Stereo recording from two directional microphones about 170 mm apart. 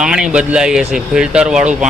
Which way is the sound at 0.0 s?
5° right (ahead or behind).